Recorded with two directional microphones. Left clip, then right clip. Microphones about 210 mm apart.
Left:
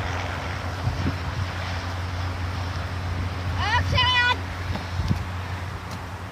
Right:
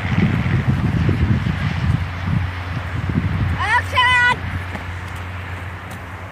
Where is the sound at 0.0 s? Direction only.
45° left (ahead or behind).